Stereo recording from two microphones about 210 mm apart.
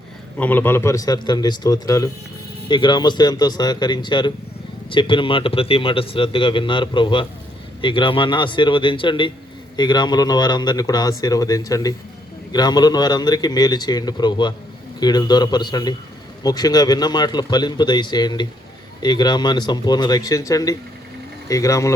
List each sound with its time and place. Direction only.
0.3 s a man's voice: 10° left (ahead or behind)